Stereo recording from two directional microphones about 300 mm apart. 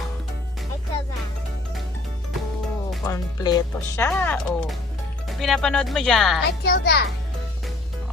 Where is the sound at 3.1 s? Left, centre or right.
Centre.